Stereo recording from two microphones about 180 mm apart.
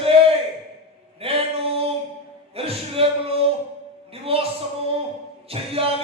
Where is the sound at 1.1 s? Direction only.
30° right (ahead or behind).